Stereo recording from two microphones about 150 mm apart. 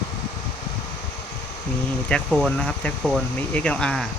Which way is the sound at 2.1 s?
5° left (ahead or behind).